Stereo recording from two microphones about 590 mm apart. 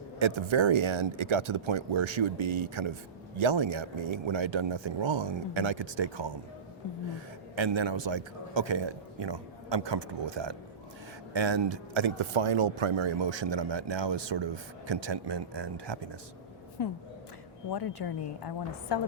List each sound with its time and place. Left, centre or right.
0.2 s speech: right
7.5 s speech: right
16.8 s a woman's voice: left